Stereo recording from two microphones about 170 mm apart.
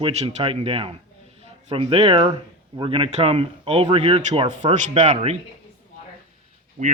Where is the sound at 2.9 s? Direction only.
35° right (ahead or behind).